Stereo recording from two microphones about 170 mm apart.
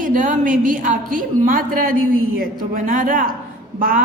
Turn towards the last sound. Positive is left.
turn(degrees=-55)  # may be behind; listen again after turning